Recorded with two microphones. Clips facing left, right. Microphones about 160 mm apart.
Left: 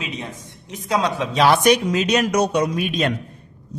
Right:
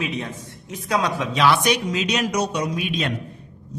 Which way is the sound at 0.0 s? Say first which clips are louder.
Right 3 dB; 20° left (ahead or behind).